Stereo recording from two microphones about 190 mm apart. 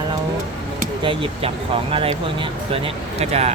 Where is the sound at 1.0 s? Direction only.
30° right (ahead or behind).